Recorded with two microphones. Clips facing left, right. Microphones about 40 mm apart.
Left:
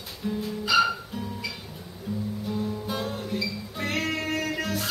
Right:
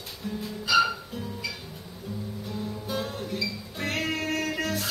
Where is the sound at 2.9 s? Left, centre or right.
Centre.